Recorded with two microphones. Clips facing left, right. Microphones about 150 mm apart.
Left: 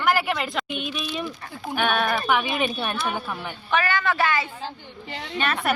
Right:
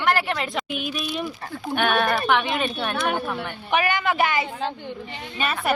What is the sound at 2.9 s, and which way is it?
Speech, 60° right (ahead or behind).